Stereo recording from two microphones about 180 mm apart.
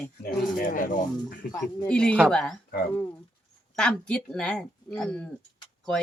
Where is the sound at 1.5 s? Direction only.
20° left (ahead or behind).